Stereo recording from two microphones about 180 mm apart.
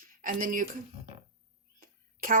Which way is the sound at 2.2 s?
50° right (ahead or behind).